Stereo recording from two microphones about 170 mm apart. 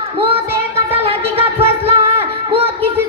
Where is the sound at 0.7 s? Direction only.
35° right (ahead or behind).